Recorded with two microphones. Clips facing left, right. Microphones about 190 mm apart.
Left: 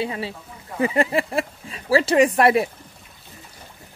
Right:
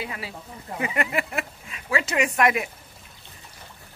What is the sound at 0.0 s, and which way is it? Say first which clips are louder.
Speech: left 7 dB; 30° left (ahead or behind).